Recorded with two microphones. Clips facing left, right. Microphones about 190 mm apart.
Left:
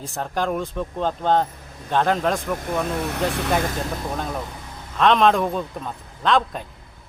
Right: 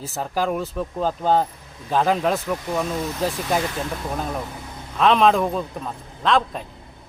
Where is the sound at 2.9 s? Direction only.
65° left (ahead or behind).